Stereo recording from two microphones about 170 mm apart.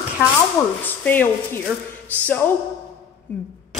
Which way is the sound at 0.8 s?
10° left (ahead or behind).